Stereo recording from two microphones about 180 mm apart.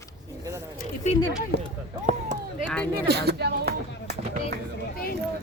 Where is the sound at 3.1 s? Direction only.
65° right (ahead or behind).